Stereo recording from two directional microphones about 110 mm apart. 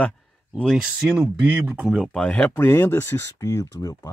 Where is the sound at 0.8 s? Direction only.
5° right (ahead or behind).